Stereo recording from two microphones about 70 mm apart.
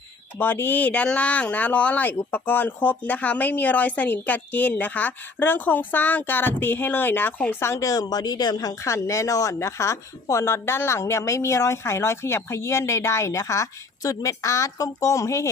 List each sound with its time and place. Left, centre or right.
0.3 s speech: left
7.6 s a woman's voice: left
8.8 s a woman's voice: left